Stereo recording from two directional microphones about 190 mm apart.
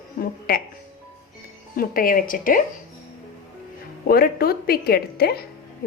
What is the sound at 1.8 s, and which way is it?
Speech, 50° left (ahead or behind).